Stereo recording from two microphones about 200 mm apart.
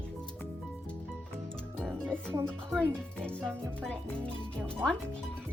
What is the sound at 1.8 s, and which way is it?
Music, 5° left (ahead or behind).